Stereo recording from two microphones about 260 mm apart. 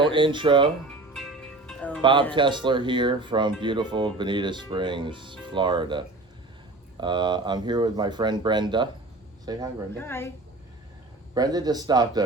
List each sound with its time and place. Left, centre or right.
0.0 s speech: centre
0.9 s music: centre
2.0 s speech: centre
10.0 s a woman's voice: centre
11.3 s speech: centre